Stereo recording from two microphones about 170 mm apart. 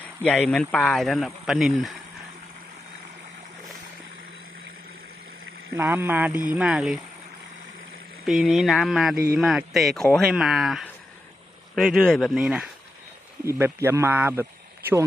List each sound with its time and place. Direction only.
0.0 s speech: 10° left (ahead or behind)
5.7 s speech: 15° right (ahead or behind)
8.2 s speech: centre (ahead or behind)
9.1 s speech: 60° right (ahead or behind)
9.4 s speech: centre (ahead or behind)
13.4 s speech: 15° right (ahead or behind)